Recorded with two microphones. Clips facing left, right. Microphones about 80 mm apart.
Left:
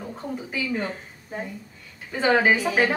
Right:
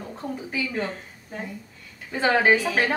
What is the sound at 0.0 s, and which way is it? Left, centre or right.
Speech, centre.